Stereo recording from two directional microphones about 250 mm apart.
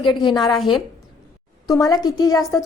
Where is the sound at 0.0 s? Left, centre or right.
Centre.